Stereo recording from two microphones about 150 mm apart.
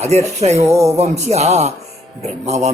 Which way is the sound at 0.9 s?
45° right (ahead or behind).